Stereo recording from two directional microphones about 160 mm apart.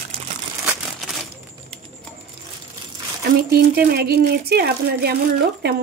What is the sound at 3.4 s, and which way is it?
Speech, 75° right (ahead or behind).